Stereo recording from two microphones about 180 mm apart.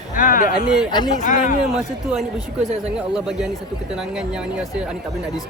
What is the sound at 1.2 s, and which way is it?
Speech, 45° left (ahead or behind).